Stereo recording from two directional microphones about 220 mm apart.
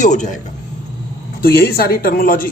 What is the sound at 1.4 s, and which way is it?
Speech, 45° left (ahead or behind).